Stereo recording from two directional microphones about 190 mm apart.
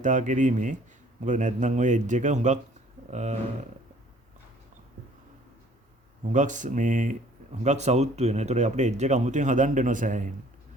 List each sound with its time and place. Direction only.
0.0 s speech: 40° right (ahead or behind)
6.3 s speech: 40° right (ahead or behind)